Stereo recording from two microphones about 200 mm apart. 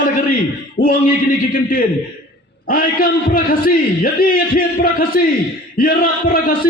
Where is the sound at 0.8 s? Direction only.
45° left (ahead or behind).